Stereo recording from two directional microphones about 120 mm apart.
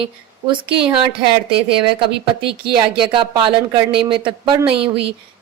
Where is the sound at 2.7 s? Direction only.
45° right (ahead or behind).